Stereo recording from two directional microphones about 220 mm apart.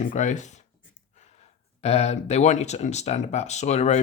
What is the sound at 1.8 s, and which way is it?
Speech, 30° left (ahead or behind).